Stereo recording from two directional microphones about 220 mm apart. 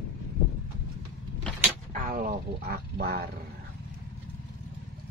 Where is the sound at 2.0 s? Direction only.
40° right (ahead or behind).